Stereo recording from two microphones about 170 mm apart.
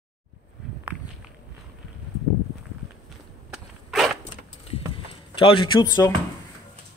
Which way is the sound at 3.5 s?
Centre (ahead or behind).